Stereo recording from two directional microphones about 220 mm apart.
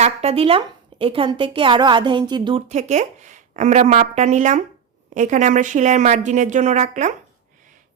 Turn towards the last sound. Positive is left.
turn(degrees=-35)  # may be behind; listen again after turning